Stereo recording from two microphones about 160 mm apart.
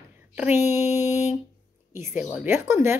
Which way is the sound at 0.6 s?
45° left (ahead or behind).